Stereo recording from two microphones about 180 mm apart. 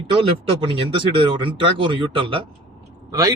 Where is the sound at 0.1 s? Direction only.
30° right (ahead or behind).